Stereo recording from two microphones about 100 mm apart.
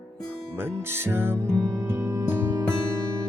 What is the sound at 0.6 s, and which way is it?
Music, 20° right (ahead or behind).